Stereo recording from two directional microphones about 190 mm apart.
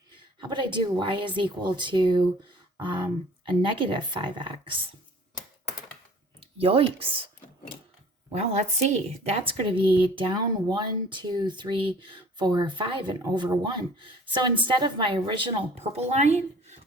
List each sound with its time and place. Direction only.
0.3 s speech: 25° right (ahead or behind)
6.6 s speech: 30° right (ahead or behind)
8.3 s a woman's voice: 35° right (ahead or behind)